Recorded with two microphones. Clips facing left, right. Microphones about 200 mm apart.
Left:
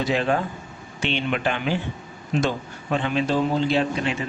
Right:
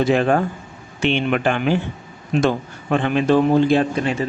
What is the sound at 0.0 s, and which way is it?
A man's voice, 50° right (ahead or behind).